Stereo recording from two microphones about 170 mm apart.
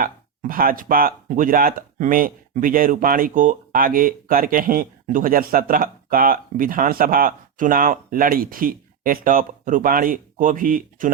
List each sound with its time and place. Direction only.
0.0 s speech: 55° right (ahead or behind)